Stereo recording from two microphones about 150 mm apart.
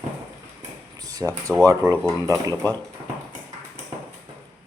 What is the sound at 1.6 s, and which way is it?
Speech, 25° right (ahead or behind).